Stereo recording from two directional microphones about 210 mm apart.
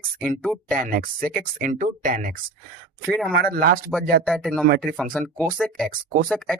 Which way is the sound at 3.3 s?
45° right (ahead or behind).